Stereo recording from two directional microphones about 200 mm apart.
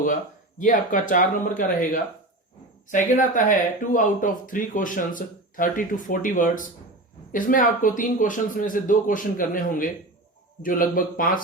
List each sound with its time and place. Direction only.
0.6 s speech: 40° left (ahead or behind)